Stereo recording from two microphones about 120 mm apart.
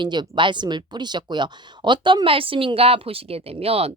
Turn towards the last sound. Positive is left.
turn(degrees=-55)  # may be behind; listen again after turning